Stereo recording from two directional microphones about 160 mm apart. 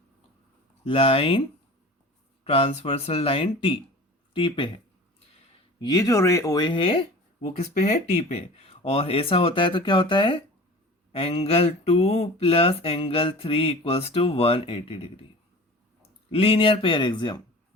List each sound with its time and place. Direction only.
0.9 s speech: 35° left (ahead or behind)
2.4 s speech: 35° left (ahead or behind)
5.8 s speech: 20° left (ahead or behind)
7.4 s speech: 45° left (ahead or behind)
16.3 s speech: 35° left (ahead or behind)